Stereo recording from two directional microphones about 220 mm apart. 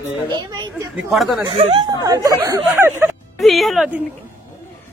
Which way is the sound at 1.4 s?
25° right (ahead or behind).